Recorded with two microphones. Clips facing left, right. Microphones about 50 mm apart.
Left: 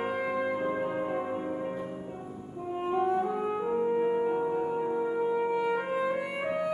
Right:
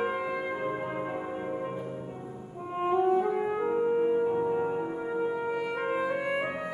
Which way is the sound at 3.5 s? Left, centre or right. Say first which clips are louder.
Right 1 dB; centre.